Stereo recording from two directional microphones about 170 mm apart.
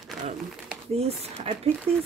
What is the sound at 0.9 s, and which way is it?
Speech, 40° right (ahead or behind).